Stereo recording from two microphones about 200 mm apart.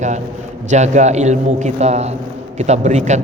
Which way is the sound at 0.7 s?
35° right (ahead or behind).